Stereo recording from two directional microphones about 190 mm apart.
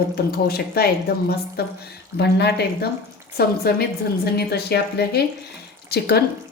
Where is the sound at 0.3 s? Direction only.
55° left (ahead or behind).